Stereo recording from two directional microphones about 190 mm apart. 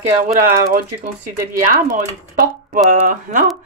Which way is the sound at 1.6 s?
45° right (ahead or behind).